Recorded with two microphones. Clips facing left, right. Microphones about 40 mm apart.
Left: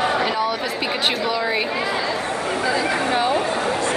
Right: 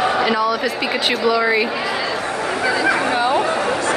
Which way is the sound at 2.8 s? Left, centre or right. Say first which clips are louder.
Right 3 dB; right.